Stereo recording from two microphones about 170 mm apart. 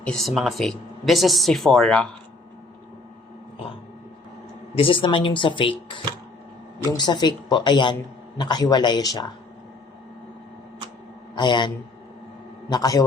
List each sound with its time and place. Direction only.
0.0 s speech: 5° left (ahead or behind)
4.7 s speech: 30° left (ahead or behind)
11.3 s a man's voice: 25° left (ahead or behind)